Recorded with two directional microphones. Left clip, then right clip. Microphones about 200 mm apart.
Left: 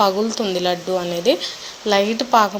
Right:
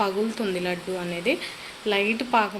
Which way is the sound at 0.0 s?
15° left (ahead or behind).